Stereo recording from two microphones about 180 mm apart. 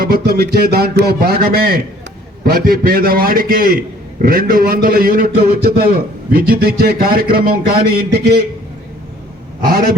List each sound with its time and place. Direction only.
0.0 s a man's voice: 60° right (ahead or behind)
9.6 s a man's voice: 60° right (ahead or behind)